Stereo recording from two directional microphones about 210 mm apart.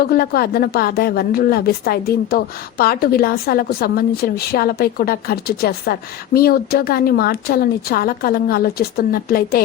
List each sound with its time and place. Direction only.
0.0 s speech: 45° left (ahead or behind)